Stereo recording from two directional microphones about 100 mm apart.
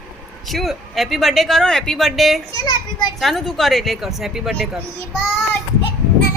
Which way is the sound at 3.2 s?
Centre (ahead or behind).